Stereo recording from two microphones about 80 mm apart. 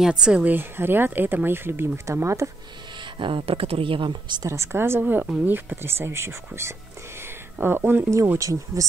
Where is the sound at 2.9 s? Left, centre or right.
Right.